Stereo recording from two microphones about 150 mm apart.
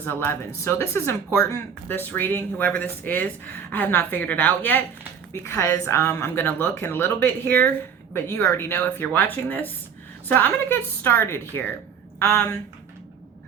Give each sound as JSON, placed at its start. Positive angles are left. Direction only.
{"t": 0.0, "sound": "speech", "side_deg": 15}